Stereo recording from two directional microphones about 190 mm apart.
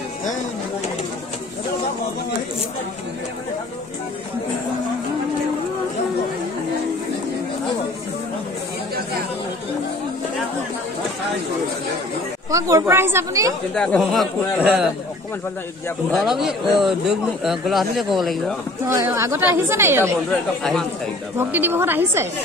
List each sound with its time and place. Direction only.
12.4 s speech: 15° right (ahead or behind)
13.7 s speech: centre (ahead or behind)
16.1 s speech: centre (ahead or behind)
18.9 s speech: 15° right (ahead or behind)
20.2 s speech: 5° left (ahead or behind)
21.4 s speech: 10° right (ahead or behind)